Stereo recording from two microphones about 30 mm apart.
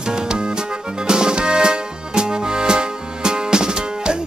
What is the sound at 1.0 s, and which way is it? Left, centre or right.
Music, right.